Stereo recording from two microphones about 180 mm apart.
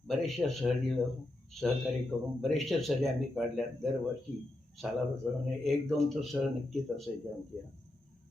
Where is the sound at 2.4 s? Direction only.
Centre (ahead or behind).